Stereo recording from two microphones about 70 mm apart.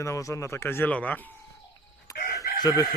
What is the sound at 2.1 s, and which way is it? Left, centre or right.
Chicken, left.